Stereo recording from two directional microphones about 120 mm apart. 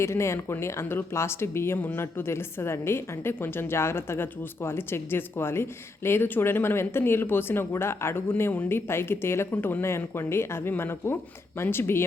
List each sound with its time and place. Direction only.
0.0 s a woman's voice: 25° left (ahead or behind)